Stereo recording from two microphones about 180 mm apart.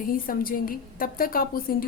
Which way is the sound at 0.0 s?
50° left (ahead or behind).